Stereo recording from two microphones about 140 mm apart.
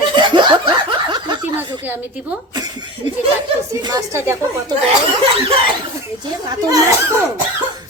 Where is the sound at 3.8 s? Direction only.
25° right (ahead or behind).